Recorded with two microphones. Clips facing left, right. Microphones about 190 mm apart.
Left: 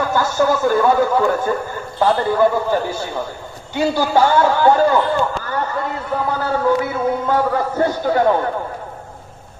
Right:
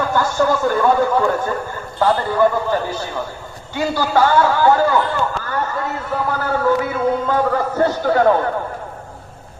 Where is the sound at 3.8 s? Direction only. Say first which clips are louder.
Left 1 dB; 15° left (ahead or behind).